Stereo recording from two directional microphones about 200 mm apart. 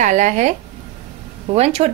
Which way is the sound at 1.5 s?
30° right (ahead or behind).